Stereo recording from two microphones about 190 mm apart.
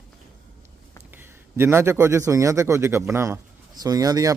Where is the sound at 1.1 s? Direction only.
10° right (ahead or behind).